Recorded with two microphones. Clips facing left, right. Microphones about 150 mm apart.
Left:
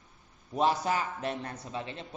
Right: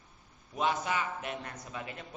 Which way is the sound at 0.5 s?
35° left (ahead or behind).